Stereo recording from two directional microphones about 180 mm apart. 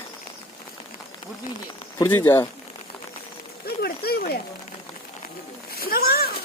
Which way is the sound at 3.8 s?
60° left (ahead or behind).